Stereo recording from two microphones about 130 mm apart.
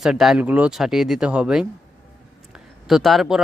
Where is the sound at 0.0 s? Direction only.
5° right (ahead or behind).